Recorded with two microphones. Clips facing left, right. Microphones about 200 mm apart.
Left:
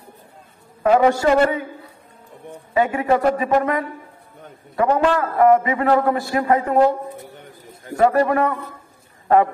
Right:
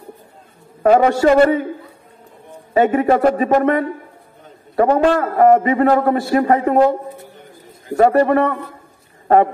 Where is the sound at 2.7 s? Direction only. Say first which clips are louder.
Right 4 dB; 40° right (ahead or behind).